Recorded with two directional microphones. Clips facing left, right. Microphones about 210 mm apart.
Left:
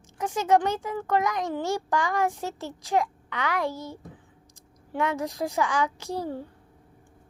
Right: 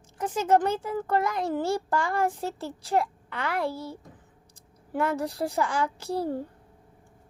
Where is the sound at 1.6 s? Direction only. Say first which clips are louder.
Left 1 dB; 30° right (ahead or behind).